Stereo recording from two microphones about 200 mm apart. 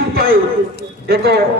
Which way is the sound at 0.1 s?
50° right (ahead or behind).